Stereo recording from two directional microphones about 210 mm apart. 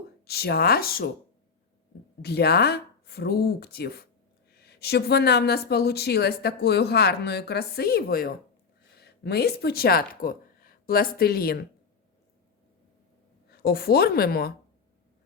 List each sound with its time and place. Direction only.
0.3 s speech: 50° left (ahead or behind)
2.2 s speech: 50° left (ahead or behind)
13.5 s speech: 45° left (ahead or behind)